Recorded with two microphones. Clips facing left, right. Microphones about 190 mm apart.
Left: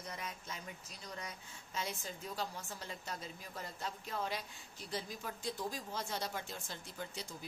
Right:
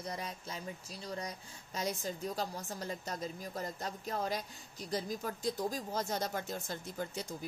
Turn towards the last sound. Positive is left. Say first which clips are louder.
# right 6 dB
turn(degrees=-45)  # may be behind; listen again after turning